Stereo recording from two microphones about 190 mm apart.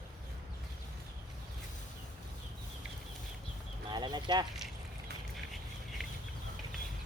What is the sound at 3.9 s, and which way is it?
Speech, 20° right (ahead or behind).